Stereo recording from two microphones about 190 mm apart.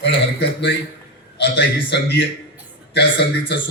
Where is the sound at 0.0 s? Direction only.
65° left (ahead or behind).